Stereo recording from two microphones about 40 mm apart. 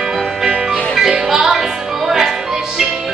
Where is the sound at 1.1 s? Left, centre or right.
Centre.